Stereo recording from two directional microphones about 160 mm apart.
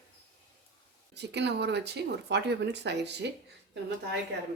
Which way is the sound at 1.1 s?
90° right.